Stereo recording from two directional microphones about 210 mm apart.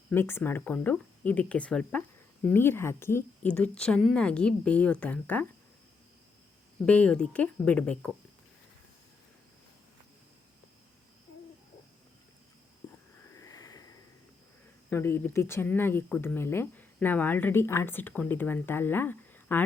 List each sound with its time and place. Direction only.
0.1 s speech: 10° left (ahead or behind)
6.8 s speech: 5° left (ahead or behind)
12.8 s a sound: 20° left (ahead or behind)
14.8 s speech: 10° left (ahead or behind)